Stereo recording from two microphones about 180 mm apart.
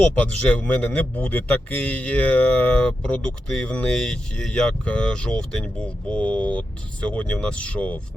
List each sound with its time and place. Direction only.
0.0 s a man's voice: 5° left (ahead or behind)